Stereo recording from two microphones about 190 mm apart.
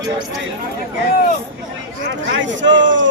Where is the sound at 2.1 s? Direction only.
75° right (ahead or behind).